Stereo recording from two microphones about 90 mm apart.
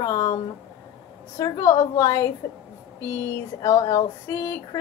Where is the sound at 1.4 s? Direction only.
35° left (ahead or behind).